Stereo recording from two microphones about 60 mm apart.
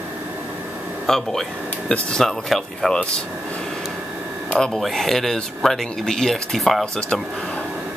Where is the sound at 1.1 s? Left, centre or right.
Centre.